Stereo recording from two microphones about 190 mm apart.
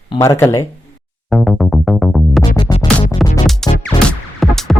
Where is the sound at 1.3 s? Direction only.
Centre (ahead or behind).